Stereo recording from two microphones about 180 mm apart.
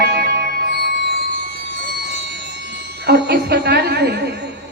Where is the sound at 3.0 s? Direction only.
70° right (ahead or behind).